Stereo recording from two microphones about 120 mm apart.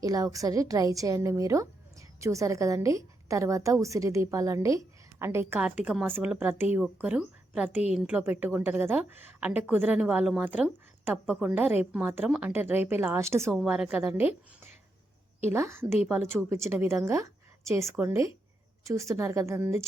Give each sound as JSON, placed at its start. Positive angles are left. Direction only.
{"t": 0.0, "sound": "a woman's voice", "side_deg": -30}
{"t": 13.5, "sound": "a woman's voice", "side_deg": -5}
{"t": 15.4, "sound": "a woman's voice", "side_deg": -20}